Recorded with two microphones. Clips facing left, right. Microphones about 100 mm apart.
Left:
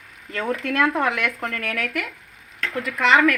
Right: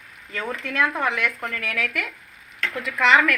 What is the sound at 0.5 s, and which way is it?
Speech, 55° left (ahead or behind).